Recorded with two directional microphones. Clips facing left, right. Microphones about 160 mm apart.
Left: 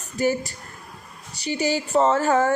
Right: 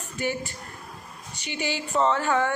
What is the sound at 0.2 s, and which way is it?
A woman's voice, 40° left (ahead or behind).